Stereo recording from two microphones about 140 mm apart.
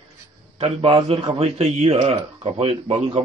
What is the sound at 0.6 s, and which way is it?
A man's voice, 45° right (ahead or behind).